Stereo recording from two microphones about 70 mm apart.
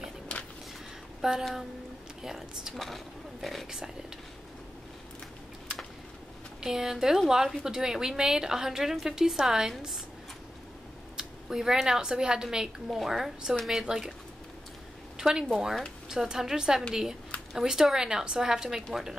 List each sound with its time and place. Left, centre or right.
0.3 s a sound: centre
1.2 s speech: centre
6.6 s a woman's voice: centre
11.1 s a woman's voice: centre
15.1 s a woman's voice: centre